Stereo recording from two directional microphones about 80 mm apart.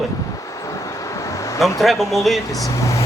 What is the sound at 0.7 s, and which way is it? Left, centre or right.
Vehicle, left.